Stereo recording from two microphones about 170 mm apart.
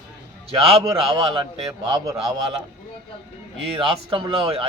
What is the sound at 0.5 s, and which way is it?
Speech, 35° right (ahead or behind).